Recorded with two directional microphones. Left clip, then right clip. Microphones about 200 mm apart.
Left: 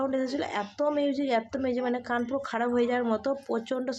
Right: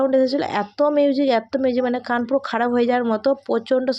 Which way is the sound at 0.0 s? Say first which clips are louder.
Right 11 dB; 35° right (ahead or behind).